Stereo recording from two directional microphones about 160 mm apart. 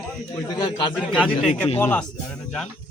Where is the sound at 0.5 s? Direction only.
25° left (ahead or behind).